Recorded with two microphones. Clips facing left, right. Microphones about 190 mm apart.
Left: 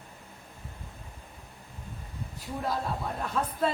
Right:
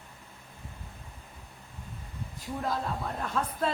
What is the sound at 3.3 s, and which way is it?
Speech, 5° left (ahead or behind).